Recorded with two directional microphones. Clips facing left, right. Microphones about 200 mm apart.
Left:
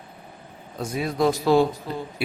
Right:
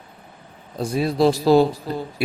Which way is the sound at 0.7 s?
30° right (ahead or behind).